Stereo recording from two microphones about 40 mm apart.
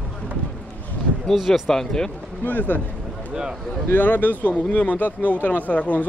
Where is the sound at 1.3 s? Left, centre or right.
Centre.